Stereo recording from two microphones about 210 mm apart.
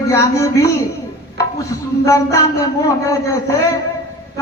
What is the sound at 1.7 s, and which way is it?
Speech, 15° left (ahead or behind).